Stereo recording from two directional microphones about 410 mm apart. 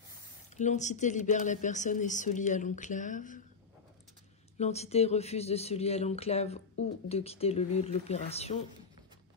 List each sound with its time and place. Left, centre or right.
0.6 s speech: centre
4.6 s speech: centre